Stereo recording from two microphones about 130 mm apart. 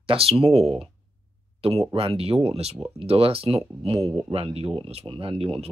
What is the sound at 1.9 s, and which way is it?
Speech, 45° right (ahead or behind).